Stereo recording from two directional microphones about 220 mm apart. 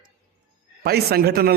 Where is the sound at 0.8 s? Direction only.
45° right (ahead or behind).